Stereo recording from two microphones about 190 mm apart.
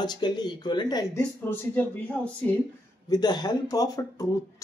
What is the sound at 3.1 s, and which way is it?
Speech, 20° left (ahead or behind).